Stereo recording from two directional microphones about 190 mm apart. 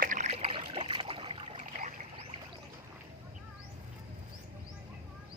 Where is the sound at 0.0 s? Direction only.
40° right (ahead or behind).